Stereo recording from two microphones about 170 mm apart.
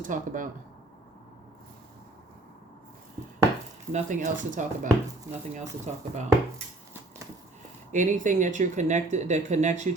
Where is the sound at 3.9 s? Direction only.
45° right (ahead or behind).